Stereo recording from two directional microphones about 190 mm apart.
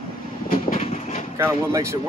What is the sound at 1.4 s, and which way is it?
Speech, 15° right (ahead or behind).